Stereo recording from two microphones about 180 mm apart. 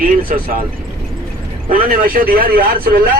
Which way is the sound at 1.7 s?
55° right (ahead or behind).